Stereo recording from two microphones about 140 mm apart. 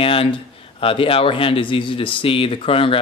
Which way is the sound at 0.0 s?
40° left (ahead or behind).